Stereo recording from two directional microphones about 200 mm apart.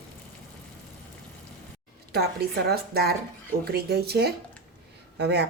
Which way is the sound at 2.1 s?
55° right (ahead or behind).